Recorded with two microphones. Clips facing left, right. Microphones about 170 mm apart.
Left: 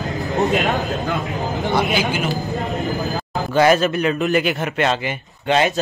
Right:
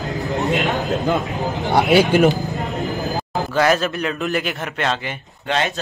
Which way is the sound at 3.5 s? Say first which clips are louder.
Left 3 dB; centre (ahead or behind).